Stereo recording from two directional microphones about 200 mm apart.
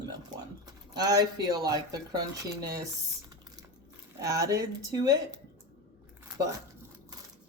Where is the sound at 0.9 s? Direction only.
20° right (ahead or behind).